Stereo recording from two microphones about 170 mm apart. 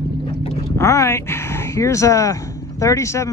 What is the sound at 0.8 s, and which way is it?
Speech, 15° left (ahead or behind).